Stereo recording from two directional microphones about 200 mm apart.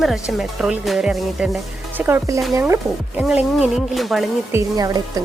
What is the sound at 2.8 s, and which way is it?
Speech, centre (ahead or behind).